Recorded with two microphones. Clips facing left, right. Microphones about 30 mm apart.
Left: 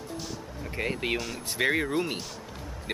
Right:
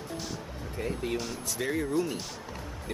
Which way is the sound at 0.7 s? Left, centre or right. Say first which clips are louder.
Left 3 dB; left.